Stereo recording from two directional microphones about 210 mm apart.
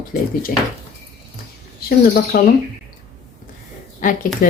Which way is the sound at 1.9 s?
45° left (ahead or behind).